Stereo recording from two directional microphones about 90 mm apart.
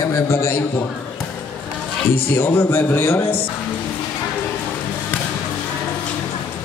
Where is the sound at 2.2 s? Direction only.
25° left (ahead or behind).